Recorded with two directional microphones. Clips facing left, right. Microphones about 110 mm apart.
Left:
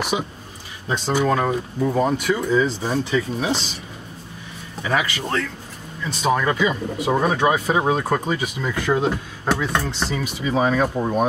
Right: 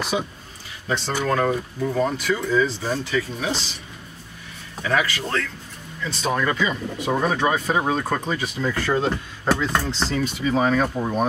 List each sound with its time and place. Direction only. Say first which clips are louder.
0.8 s speech: left 3 dB; 15° left (ahead or behind)
4.8 s speech: even; 15° left (ahead or behind)